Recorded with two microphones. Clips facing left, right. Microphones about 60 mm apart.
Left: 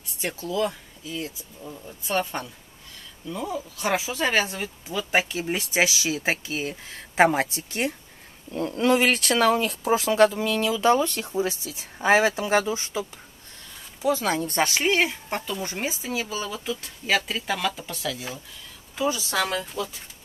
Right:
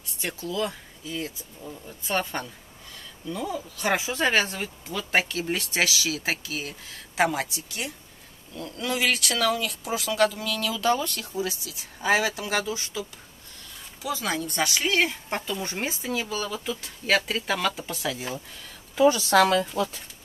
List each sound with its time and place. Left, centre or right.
0.2 s speech: left
1.9 s speech: centre
3.3 s speech: centre
4.1 s speech: centre; by 13.0 s left
14.0 s speech: left
15.0 s speech: centre
16.1 s speech: centre
18.1 s speech: right
18.9 s a woman's voice: right